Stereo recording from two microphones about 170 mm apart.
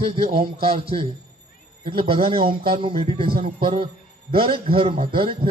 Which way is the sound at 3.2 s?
60° right (ahead or behind).